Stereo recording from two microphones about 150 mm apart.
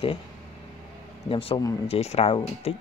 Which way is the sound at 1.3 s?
40° left (ahead or behind).